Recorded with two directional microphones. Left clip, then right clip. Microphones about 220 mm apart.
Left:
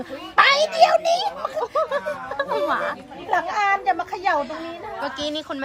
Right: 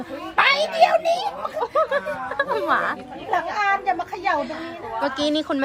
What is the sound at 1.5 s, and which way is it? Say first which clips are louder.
Speech: right 3 dB; 25° left (ahead or behind).